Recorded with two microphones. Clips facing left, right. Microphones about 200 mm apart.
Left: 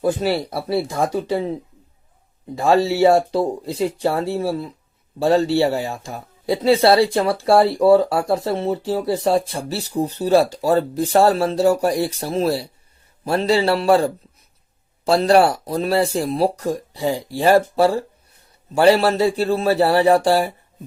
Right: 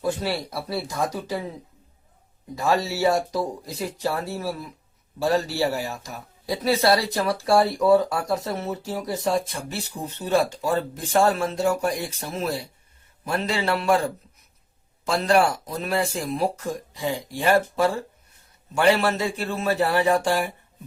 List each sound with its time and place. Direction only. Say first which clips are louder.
0.0 s speech: left 6 dB; 25° left (ahead or behind)
2.6 s speech: left 7 dB; 30° left (ahead or behind)